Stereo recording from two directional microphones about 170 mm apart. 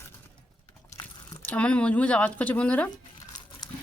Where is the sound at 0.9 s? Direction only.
15° left (ahead or behind).